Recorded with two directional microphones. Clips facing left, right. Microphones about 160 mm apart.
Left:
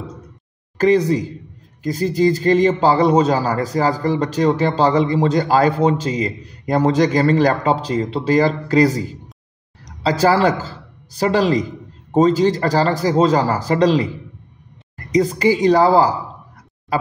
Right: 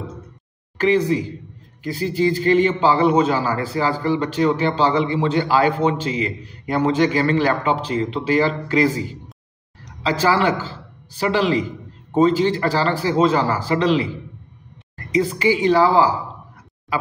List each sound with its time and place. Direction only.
0.7 s a man's voice: 40° left (ahead or behind)
15.0 s a man's voice: 40° left (ahead or behind)